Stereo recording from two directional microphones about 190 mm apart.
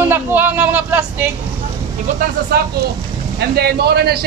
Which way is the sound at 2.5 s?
55° right (ahead or behind).